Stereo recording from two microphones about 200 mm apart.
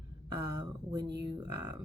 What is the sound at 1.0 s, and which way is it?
Speech, 55° right (ahead or behind).